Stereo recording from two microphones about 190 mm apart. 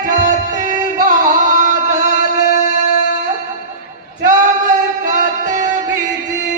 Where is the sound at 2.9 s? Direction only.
50° left (ahead or behind).